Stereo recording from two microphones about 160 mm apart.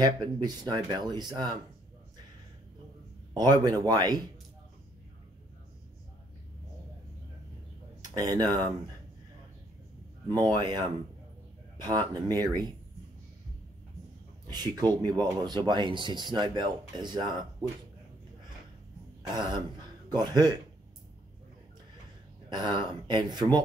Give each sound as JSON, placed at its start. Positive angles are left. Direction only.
{"t": 0.0, "sound": "speech", "side_deg": -25}
{"t": 3.3, "sound": "speech", "side_deg": -25}
{"t": 8.1, "sound": "speech", "side_deg": -25}
{"t": 10.2, "sound": "speech", "side_deg": -25}
{"t": 11.8, "sound": "speech", "side_deg": -25}
{"t": 14.5, "sound": "speech", "side_deg": -25}
{"t": 19.3, "sound": "speech", "side_deg": -25}
{"t": 22.5, "sound": "speech", "side_deg": -30}